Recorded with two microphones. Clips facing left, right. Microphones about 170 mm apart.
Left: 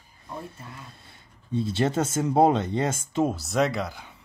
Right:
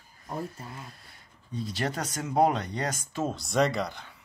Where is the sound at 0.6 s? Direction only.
30° right (ahead or behind).